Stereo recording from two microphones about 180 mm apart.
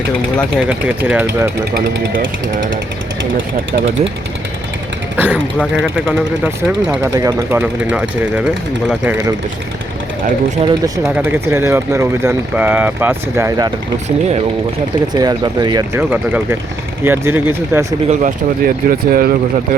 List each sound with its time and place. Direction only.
0.7 s speech: 10° right (ahead or behind)
3.3 s speech: 90° right
5.1 s speech: 10° right (ahead or behind)
7.2 s speech: 15° right (ahead or behind)
10.6 s speech: 25° right (ahead or behind)
11.0 s speech: 10° right (ahead or behind)
15.1 s speech: 20° right (ahead or behind)
16.0 s speech: 10° right (ahead or behind)
18.1 s speech: 45° right (ahead or behind)